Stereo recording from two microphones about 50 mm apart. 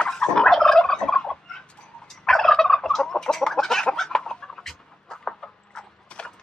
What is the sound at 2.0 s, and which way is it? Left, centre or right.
Gobble, centre.